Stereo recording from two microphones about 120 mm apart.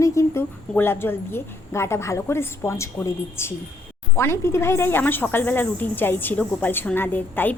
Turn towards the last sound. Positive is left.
turn(degrees=15)  # may be behind; listen again after turning